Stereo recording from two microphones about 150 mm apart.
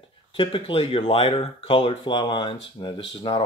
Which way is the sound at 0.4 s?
35° left (ahead or behind).